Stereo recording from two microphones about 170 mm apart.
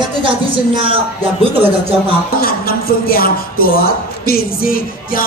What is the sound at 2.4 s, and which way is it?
A woman's voice, 60° left (ahead or behind).